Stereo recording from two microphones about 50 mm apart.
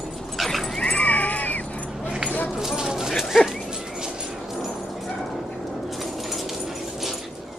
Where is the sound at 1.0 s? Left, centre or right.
Left.